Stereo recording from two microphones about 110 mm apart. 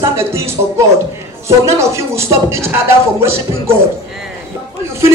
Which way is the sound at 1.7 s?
25° right (ahead or behind).